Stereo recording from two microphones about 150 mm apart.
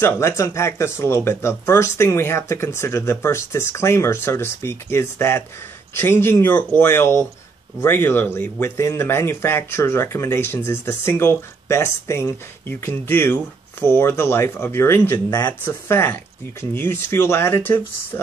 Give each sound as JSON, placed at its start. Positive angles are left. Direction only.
{"t": 0.0, "sound": "speech", "side_deg": 15}